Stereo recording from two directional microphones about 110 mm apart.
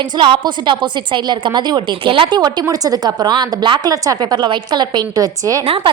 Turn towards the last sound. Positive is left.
turn(degrees=-55)  # may be behind; listen again after turning